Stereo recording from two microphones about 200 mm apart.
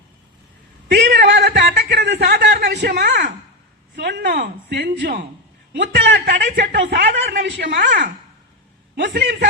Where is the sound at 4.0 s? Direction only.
55° right (ahead or behind).